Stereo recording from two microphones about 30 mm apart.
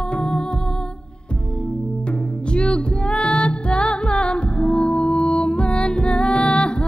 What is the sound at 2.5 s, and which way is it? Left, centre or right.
Music, left.